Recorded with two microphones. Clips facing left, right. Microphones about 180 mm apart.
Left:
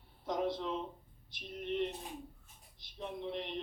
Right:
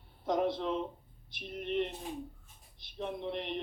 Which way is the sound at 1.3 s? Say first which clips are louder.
Right 3 dB; 65° right (ahead or behind).